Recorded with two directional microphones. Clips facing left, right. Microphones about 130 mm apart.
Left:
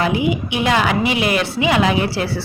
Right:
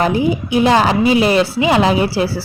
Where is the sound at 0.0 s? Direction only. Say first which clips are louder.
Right 3 dB; 40° right (ahead or behind).